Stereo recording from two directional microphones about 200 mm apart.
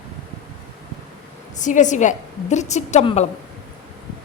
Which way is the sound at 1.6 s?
40° left (ahead or behind).